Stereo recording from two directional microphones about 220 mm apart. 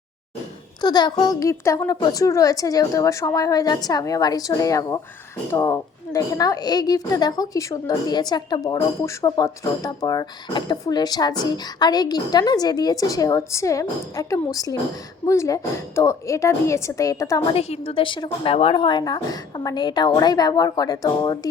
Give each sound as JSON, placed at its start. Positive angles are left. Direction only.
{"t": 0.8, "sound": "a child's voice", "side_deg": 20}